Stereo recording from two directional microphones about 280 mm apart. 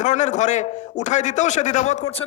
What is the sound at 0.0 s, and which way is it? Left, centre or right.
Speech, left.